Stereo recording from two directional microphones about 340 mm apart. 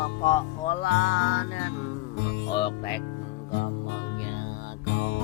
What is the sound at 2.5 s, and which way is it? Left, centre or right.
Music, centre.